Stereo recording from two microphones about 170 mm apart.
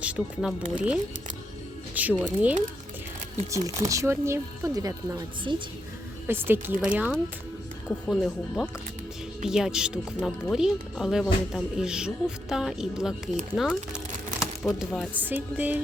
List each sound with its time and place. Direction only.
0.0 s speech: 10° right (ahead or behind)
2.0 s speech: 10° right (ahead or behind)
3.5 s speech: 20° right (ahead or behind)
6.2 s speech: 10° right (ahead or behind)